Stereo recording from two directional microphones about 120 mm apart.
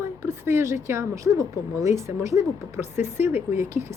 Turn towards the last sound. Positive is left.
turn(degrees=-20)  # may be behind; listen again after turning